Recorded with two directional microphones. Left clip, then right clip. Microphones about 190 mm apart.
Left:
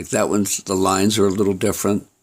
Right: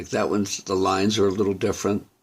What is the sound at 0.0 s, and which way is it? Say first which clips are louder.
Speech: left 4 dB; 40° left (ahead or behind).